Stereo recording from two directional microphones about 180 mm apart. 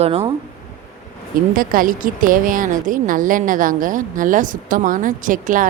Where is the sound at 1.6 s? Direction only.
50° right (ahead or behind).